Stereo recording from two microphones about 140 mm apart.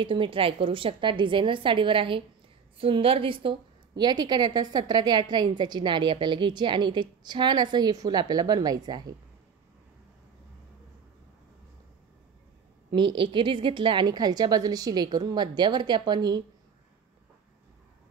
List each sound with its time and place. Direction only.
0.0 s a woman's voice: 40° right (ahead or behind)
12.9 s a woman's voice: 35° right (ahead or behind)